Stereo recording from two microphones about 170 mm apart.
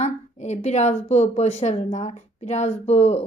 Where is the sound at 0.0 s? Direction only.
40° left (ahead or behind).